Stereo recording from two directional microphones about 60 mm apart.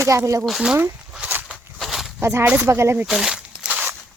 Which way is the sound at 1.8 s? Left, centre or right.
Centre.